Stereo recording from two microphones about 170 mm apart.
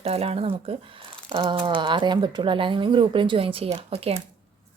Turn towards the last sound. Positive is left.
turn(degrees=-35)  # may be behind; listen again after turning